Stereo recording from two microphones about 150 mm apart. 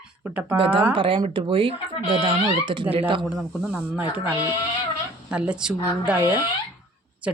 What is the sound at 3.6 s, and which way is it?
Speech, 10° right (ahead or behind).